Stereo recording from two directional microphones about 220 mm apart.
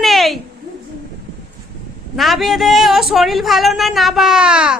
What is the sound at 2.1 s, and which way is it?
A man's voice, centre (ahead or behind).